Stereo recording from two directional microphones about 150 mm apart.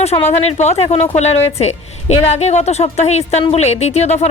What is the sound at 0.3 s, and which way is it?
A woman's voice, 45° left (ahead or behind).